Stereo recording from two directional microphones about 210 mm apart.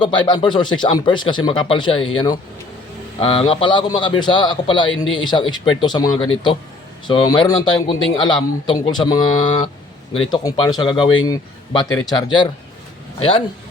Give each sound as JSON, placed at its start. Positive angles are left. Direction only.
{"t": 0.0, "sound": "a man's voice", "side_deg": 20}